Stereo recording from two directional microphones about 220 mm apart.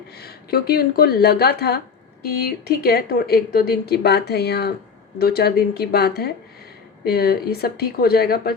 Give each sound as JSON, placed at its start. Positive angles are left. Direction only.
{"t": 0.2, "sound": "speech", "side_deg": 45}